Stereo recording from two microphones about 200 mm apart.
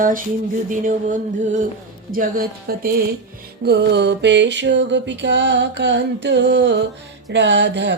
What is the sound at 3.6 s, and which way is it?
Music, 55° right (ahead or behind).